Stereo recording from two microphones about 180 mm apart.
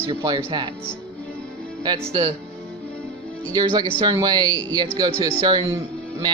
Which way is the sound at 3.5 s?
20° right (ahead or behind).